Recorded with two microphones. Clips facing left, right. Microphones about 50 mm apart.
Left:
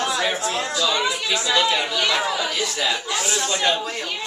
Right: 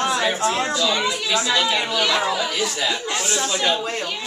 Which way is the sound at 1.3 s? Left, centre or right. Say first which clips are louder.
Even; centre.